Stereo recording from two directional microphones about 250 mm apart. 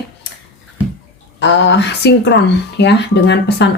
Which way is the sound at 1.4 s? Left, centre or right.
Left.